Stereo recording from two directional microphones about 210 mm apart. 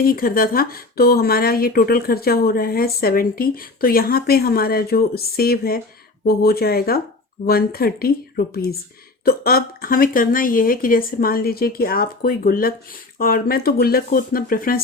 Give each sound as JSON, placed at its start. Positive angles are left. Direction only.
{"t": 0.0, "sound": "speech", "side_deg": 45}